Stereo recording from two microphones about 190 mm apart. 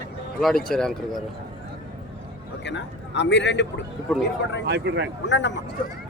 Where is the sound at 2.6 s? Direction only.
70° left (ahead or behind).